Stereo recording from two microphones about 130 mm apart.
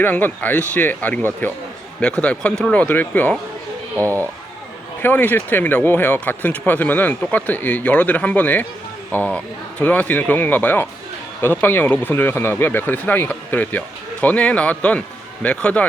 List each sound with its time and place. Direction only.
0.0 s speech: 15° left (ahead or behind)
3.9 s speech: 20° right (ahead or behind)
5.0 s speech: 15° left (ahead or behind)